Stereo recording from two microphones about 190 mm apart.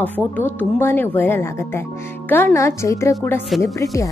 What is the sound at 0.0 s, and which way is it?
A woman's voice, 10° left (ahead or behind).